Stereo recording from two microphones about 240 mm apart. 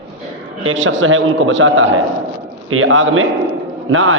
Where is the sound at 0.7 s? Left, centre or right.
Right.